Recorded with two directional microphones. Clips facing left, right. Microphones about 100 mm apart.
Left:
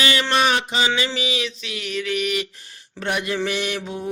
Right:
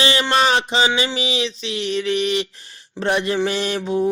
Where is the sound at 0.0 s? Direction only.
25° right (ahead or behind).